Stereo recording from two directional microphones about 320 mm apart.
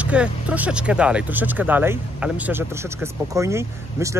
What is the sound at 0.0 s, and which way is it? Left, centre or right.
Speech, centre.